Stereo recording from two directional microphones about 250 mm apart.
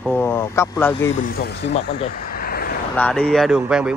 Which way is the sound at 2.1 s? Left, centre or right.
Left.